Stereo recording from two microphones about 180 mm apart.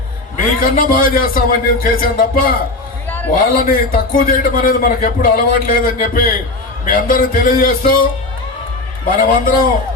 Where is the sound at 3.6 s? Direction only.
55° left (ahead or behind).